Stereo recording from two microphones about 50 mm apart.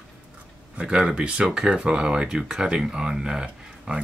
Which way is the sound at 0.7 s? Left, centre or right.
Centre.